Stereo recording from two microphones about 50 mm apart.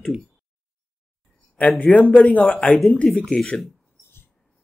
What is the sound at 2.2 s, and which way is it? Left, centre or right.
A man's voice, left.